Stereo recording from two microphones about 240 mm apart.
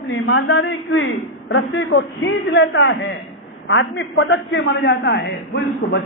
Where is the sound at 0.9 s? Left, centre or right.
Centre.